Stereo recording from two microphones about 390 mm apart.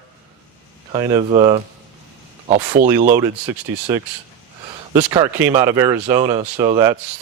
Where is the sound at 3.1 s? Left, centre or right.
Centre.